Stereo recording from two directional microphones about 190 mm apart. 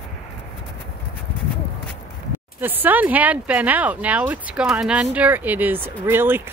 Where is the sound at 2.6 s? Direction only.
10° right (ahead or behind).